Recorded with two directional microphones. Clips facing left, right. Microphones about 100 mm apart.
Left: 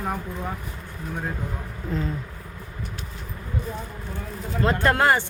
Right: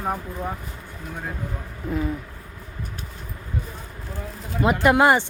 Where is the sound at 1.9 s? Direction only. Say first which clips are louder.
Right 3 dB; 10° right (ahead or behind).